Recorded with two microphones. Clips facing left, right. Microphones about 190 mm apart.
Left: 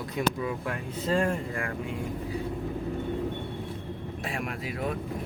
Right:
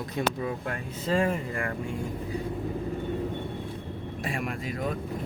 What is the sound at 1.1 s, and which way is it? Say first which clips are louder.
Speech: right 1 dB; 5° right (ahead or behind).